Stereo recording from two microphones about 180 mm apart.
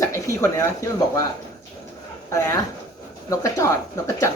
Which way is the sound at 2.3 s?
15° left (ahead or behind).